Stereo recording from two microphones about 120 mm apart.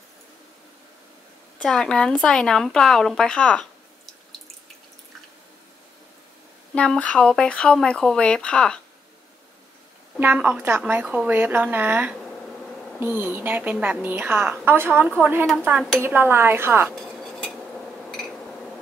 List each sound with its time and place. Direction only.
1.6 s speech: 5° left (ahead or behind)
6.7 s speech: 10° left (ahead or behind)
10.1 s a woman's voice: 15° right (ahead or behind)
16.9 s dishes: 5° left (ahead or behind)